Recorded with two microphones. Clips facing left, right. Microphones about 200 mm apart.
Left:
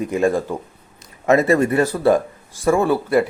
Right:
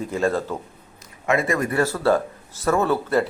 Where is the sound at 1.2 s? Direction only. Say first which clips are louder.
Left 7 dB; 40° left (ahead or behind).